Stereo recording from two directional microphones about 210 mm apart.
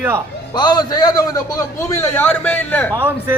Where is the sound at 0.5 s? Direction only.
20° left (ahead or behind).